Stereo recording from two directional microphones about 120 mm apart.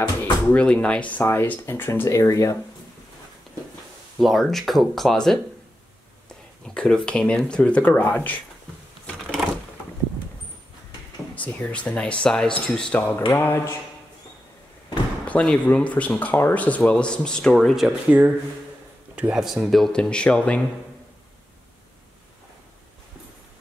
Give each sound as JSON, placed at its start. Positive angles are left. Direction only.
{"t": 0.2, "sound": "speech", "side_deg": 10}
{"t": 4.2, "sound": "speech", "side_deg": 0}
{"t": 6.6, "sound": "speech", "side_deg": 5}
{"t": 11.3, "sound": "speech", "side_deg": 10}
{"t": 13.3, "sound": "a sound", "side_deg": 20}
{"t": 15.2, "sound": "speech", "side_deg": 10}
{"t": 17.8, "sound": "speech", "side_deg": -15}